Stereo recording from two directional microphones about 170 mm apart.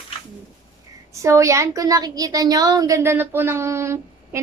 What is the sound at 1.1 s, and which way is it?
A woman's voice, 15° right (ahead or behind).